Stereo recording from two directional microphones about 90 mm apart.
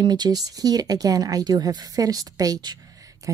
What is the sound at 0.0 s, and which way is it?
Speech, 50° right (ahead or behind).